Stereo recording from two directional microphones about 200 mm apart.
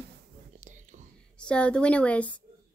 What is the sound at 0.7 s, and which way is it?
Whispering, 40° right (ahead or behind).